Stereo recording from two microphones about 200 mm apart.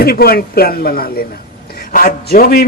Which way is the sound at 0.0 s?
50° left (ahead or behind).